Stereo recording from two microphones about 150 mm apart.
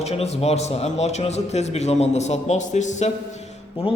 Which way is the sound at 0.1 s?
45° left (ahead or behind).